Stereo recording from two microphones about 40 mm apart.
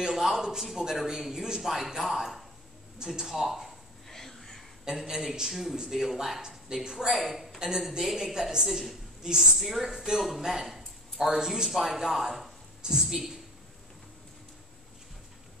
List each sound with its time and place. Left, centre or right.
0.0 s a sound: centre
0.6 s a man's voice: centre
4.1 s a sound: centre
4.8 s a man's voice: centre
9.2 s a man's voice: centre
9.6 s a man's voice: centre
12.8 s a woman's voice: centre
13.1 s a man's voice: centre